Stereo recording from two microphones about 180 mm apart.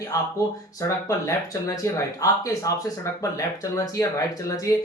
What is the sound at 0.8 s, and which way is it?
Speech, 15° left (ahead or behind).